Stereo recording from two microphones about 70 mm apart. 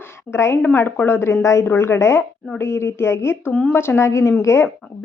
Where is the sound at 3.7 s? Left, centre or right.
Left.